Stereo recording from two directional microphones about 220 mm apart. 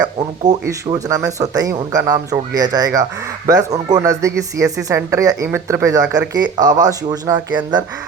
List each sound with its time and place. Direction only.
0.2 s speech: 20° right (ahead or behind)